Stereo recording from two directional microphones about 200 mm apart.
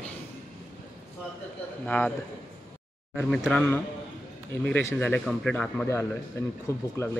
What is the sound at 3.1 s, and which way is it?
Speech, 5° left (ahead or behind).